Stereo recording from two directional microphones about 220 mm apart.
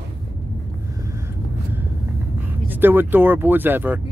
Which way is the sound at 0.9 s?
15° right (ahead or behind).